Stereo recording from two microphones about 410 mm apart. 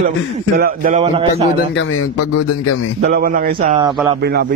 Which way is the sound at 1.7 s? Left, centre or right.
Left.